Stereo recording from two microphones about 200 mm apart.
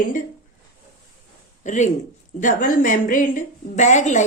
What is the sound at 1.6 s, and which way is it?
A woman's voice, 40° left (ahead or behind).